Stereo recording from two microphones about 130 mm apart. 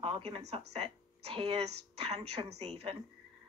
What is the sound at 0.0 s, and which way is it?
Speech, 45° right (ahead or behind).